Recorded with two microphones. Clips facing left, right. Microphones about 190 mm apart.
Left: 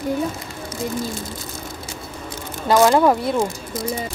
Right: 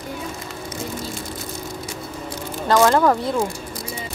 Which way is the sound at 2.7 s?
10° left (ahead or behind).